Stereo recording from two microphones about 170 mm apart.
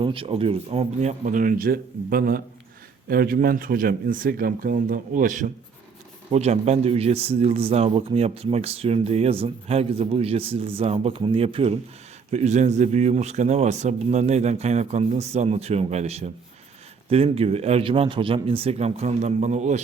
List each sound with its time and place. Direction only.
0.0 s speech: 30° right (ahead or behind)